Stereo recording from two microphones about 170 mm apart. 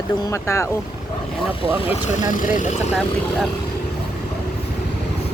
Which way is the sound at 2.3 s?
50° left (ahead or behind).